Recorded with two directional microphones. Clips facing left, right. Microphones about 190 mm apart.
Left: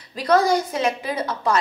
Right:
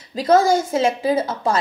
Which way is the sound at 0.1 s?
25° right (ahead or behind).